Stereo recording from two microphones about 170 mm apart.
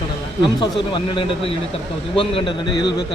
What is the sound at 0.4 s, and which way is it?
Speech, 25° left (ahead or behind).